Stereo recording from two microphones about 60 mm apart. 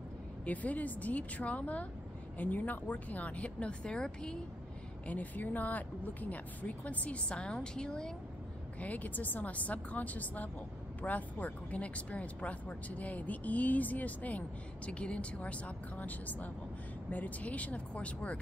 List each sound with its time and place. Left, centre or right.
0.5 s speech: left
5.0 s speech: left
8.7 s speech: left